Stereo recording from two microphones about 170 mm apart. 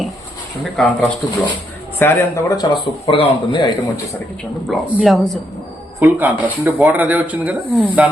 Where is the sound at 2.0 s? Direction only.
20° left (ahead or behind).